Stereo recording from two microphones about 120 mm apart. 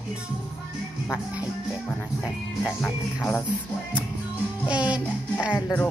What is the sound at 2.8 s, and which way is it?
Music, 20° left (ahead or behind).